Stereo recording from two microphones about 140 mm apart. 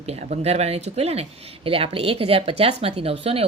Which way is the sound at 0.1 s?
50° right (ahead or behind).